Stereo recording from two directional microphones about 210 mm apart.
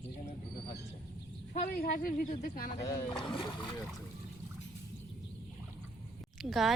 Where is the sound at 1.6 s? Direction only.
45° left (ahead or behind).